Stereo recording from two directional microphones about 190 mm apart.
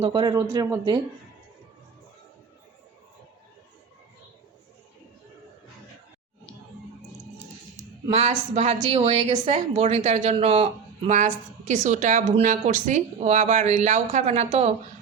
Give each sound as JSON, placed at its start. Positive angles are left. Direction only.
{"t": 0.0, "sound": "speech", "side_deg": -25}
{"t": 8.0, "sound": "a woman's voice", "side_deg": -35}